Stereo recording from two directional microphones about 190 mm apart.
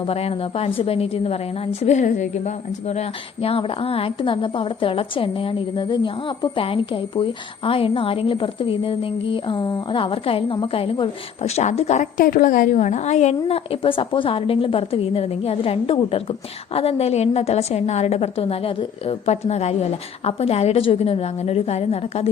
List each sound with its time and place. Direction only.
0.0 s a woman's voice: 30° left (ahead or behind)